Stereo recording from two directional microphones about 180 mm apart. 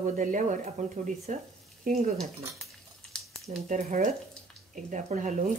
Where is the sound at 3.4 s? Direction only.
45° right (ahead or behind).